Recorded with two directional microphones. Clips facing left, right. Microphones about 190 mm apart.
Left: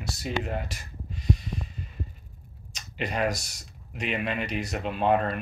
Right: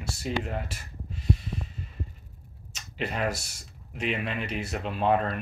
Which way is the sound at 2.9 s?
5° right (ahead or behind).